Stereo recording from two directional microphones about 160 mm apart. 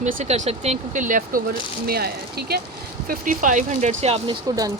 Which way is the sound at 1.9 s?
75° right (ahead or behind).